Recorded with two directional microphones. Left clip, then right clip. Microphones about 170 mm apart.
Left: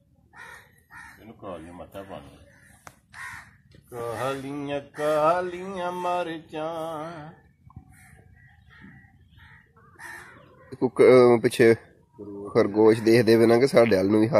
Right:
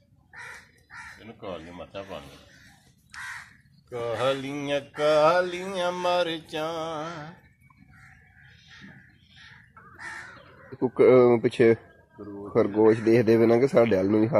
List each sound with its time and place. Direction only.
1.2 s speech: 35° right (ahead or behind)
3.9 s speech: 40° right (ahead or behind)
10.8 s a man's voice: 10° left (ahead or behind)